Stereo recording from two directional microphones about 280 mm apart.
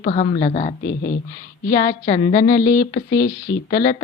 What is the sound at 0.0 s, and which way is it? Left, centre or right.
A woman's voice, left.